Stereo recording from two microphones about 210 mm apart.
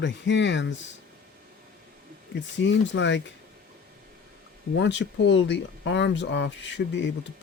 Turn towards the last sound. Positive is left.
turn(degrees=60)  # may be behind; listen again after turning